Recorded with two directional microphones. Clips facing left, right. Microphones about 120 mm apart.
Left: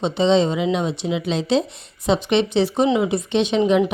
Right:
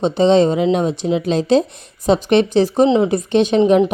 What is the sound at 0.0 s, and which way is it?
Speech, 45° right (ahead or behind).